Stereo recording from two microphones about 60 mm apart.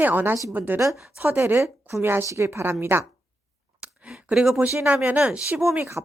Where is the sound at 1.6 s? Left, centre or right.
Right.